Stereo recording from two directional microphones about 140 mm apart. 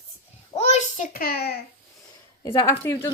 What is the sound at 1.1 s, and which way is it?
Speech, 90° left.